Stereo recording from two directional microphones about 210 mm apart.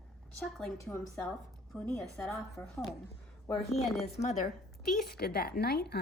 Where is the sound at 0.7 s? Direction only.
15° left (ahead or behind).